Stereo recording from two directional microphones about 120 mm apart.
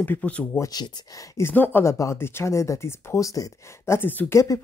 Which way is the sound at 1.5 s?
15° left (ahead or behind).